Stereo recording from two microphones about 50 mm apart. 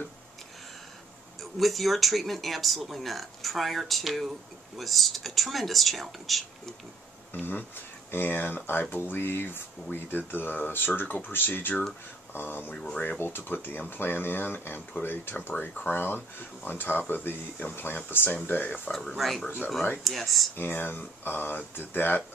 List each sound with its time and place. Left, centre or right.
1.6 s speech: centre
8.1 s speech: left
12.7 s speech: centre
13.2 s speech: left
18.9 s speech: centre
19.1 s speech: centre
19.4 s speech: left
20.0 s speech: centre
20.5 s speech: left